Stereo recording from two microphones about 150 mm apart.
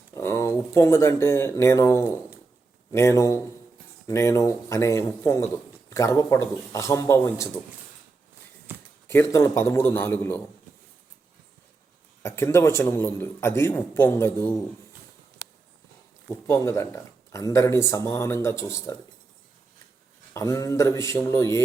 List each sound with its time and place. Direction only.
0.1 s a man's voice: 20° left (ahead or behind)
8.7 s a sound: 10° right (ahead or behind)
9.0 s speech: 20° left (ahead or behind)
12.2 s speech: 15° left (ahead or behind)
16.5 s speech: 20° left (ahead or behind)
20.3 s a man's voice: 20° left (ahead or behind)